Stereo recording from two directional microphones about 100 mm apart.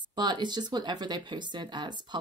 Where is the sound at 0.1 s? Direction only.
45° right (ahead or behind).